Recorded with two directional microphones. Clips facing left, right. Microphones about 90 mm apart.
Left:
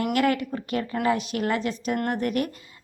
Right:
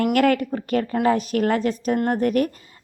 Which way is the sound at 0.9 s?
30° right (ahead or behind).